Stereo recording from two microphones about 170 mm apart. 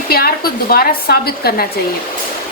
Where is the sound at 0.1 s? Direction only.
65° left (ahead or behind).